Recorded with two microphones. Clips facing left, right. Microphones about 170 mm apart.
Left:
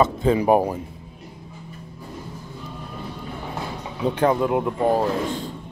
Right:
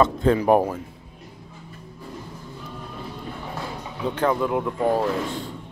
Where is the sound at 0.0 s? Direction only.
5° left (ahead or behind).